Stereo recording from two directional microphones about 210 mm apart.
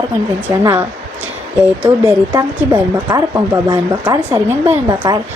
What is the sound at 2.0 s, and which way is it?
Speech, 15° right (ahead or behind).